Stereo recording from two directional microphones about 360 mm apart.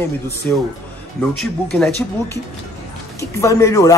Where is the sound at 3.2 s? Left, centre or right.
Centre.